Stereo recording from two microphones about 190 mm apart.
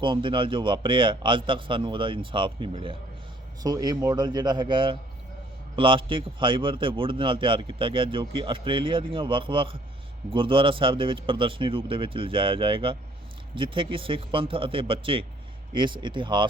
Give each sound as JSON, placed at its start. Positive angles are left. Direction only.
{"t": 0.0, "sound": "a man's voice", "side_deg": -25}